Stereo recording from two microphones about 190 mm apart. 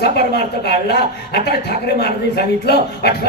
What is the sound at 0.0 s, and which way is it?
A man's voice, 60° left (ahead or behind).